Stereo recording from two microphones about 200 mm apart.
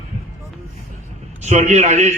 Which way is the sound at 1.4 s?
35° right (ahead or behind).